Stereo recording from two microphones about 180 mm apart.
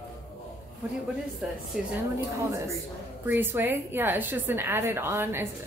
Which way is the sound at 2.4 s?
15° right (ahead or behind).